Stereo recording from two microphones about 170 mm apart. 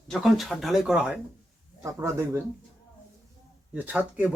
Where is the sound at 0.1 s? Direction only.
Centre (ahead or behind).